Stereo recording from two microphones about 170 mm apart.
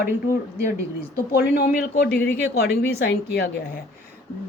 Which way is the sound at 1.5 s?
65° left (ahead or behind).